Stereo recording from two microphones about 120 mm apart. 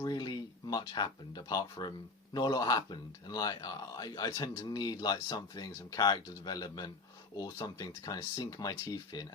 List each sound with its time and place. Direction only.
0.0 s speech: 35° left (ahead or behind)